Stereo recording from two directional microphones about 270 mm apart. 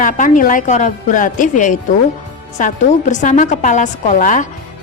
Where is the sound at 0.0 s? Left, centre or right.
Left.